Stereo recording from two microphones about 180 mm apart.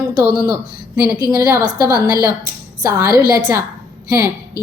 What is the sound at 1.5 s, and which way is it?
A woman's voice, 15° right (ahead or behind).